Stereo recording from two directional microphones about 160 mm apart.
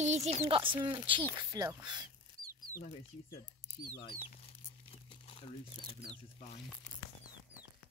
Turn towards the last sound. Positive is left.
turn(degrees=35)  # may be behind; listen again after turning